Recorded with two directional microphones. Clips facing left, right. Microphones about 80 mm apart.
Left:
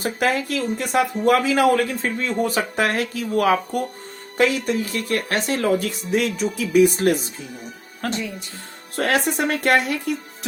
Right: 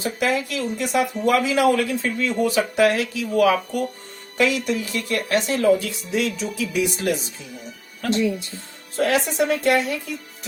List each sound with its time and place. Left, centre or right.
0.0 s speech: left
9.0 s speech: left